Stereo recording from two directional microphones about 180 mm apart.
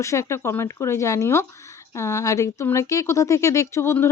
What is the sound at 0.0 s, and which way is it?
Speech, 15° left (ahead or behind).